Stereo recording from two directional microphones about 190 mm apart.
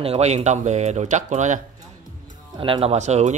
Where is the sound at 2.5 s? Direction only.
25° right (ahead or behind).